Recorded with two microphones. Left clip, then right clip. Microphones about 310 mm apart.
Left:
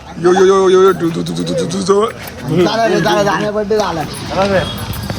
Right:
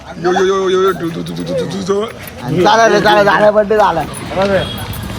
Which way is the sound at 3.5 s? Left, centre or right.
Right.